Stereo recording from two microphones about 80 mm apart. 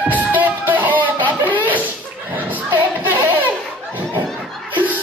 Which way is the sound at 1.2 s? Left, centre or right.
Left.